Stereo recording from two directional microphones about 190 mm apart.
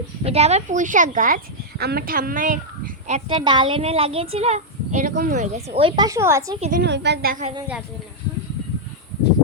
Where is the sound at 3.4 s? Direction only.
25° right (ahead or behind).